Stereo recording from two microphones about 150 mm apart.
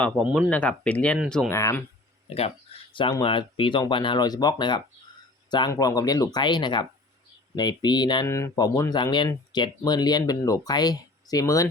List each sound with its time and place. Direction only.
0.3 s speech: 5° left (ahead or behind)
2.3 s speech: 40° left (ahead or behind)
8.3 s speech: 20° left (ahead or behind)